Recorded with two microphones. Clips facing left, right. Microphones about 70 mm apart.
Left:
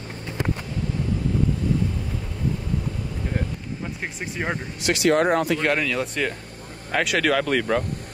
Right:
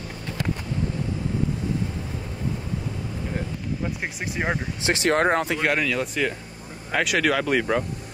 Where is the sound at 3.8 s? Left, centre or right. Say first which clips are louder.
Right 2 dB; centre.